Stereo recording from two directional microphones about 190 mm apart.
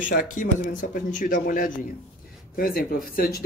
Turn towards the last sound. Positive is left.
turn(degrees=50)  # may be behind; listen again after turning